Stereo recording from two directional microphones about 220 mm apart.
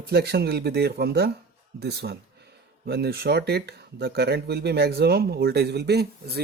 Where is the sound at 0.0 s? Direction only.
45° right (ahead or behind).